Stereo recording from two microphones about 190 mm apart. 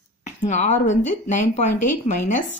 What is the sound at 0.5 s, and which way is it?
A woman's voice, 40° left (ahead or behind).